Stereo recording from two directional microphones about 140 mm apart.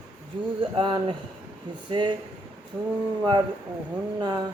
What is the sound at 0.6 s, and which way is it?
Speech, 35° right (ahead or behind).